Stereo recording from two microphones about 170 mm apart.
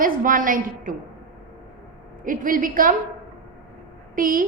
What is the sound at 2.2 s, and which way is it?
Speech, 50° right (ahead or behind).